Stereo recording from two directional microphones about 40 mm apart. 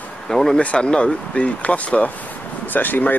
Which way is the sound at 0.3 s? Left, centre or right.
Centre.